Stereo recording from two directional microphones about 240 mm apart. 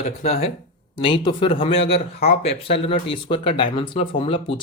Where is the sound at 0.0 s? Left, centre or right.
Left.